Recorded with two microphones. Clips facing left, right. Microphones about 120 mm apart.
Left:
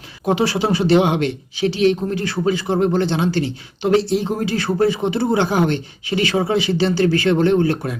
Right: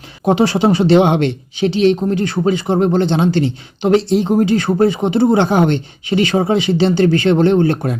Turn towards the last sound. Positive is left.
turn(degrees=-25)  # may be behind; listen again after turning